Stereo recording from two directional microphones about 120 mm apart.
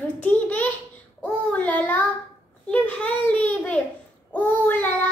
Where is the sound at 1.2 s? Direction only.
10° left (ahead or behind).